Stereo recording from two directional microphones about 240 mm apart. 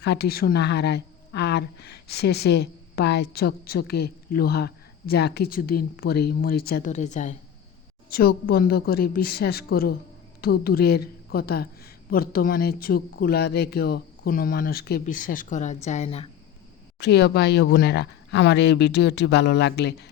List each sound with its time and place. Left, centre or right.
0.0 s a woman's voice: left
17.0 s speech: left